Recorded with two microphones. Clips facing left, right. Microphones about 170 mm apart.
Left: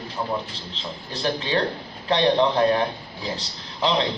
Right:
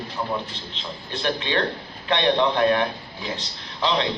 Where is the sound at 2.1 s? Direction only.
35° left (ahead or behind).